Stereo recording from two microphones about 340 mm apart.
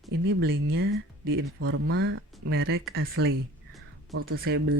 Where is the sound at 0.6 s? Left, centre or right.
Right.